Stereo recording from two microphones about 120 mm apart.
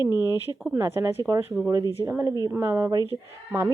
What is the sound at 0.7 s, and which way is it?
A woman's voice, 20° right (ahead or behind).